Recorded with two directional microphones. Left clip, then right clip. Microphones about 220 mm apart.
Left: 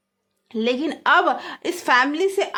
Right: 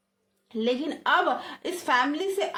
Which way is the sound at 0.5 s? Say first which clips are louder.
Left 5 dB; 45° left (ahead or behind).